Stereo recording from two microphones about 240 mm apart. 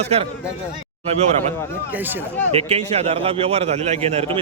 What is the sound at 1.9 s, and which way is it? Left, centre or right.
Speech, centre.